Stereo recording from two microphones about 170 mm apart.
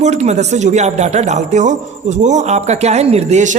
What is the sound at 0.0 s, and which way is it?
A man's voice, 40° right (ahead or behind).